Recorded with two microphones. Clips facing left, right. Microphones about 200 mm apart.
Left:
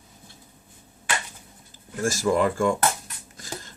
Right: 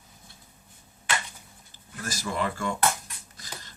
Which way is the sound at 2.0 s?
45° left (ahead or behind).